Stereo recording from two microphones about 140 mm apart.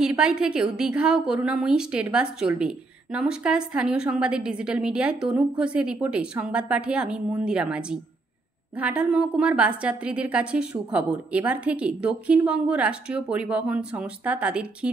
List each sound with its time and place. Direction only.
0.0 s a woman's voice: 5° right (ahead or behind)